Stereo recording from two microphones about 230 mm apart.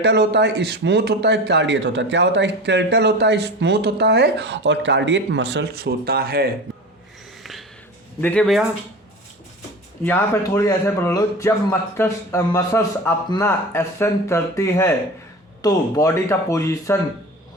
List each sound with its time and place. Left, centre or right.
0.0 s speech: right
8.2 s speech: centre
10.0 s a man's voice: centre